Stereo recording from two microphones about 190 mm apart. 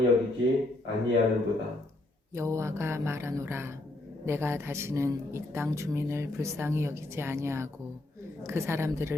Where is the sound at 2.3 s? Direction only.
15° right (ahead or behind).